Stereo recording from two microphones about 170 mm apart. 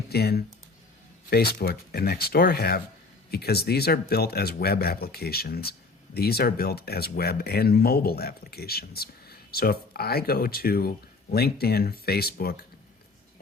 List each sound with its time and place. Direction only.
0.1 s speech: 70° left (ahead or behind)